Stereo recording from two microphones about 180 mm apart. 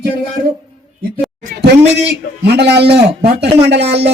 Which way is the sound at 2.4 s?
70° right (ahead or behind).